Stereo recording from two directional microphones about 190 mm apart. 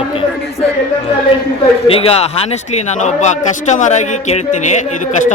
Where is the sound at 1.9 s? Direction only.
30° left (ahead or behind).